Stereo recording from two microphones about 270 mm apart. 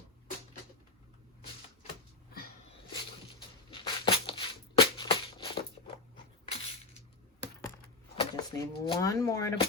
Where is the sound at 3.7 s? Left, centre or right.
Centre.